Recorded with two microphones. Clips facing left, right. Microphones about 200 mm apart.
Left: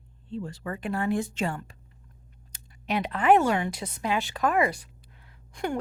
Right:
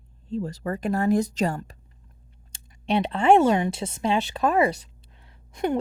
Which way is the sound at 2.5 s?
30° right (ahead or behind).